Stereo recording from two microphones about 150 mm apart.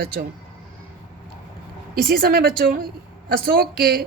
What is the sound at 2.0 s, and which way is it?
A woman's voice, 80° right.